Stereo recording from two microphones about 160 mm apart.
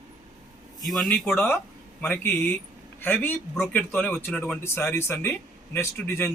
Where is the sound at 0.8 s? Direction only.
Centre (ahead or behind).